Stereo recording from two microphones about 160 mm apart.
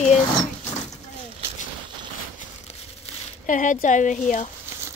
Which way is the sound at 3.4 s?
55° left (ahead or behind).